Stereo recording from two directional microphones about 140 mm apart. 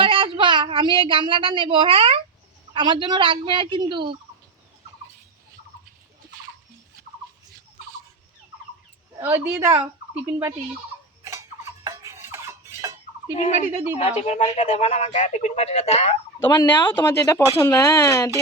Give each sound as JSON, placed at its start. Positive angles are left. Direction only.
{"t": 0.0, "sound": "speech", "side_deg": -40}
{"t": 9.2, "sound": "speech", "side_deg": -15}
{"t": 11.2, "sound": "a sound", "side_deg": -20}
{"t": 13.3, "sound": "a sound", "side_deg": 60}
{"t": 14.0, "sound": "speech", "side_deg": 50}
{"t": 16.6, "sound": "speech", "side_deg": 15}